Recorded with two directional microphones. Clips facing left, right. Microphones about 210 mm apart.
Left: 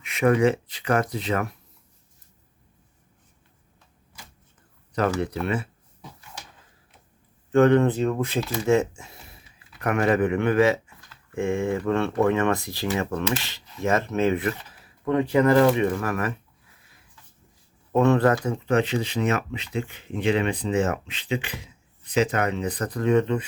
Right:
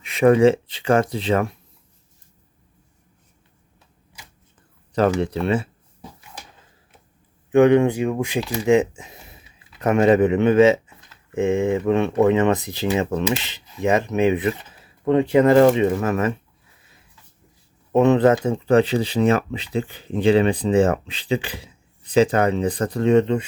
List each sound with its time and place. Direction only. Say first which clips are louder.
0.0 s speech: right 6 dB; 30° right (ahead or behind)
7.5 s speech: right 3 dB; 15° right (ahead or behind)
17.9 s speech: right 4 dB; 20° right (ahead or behind)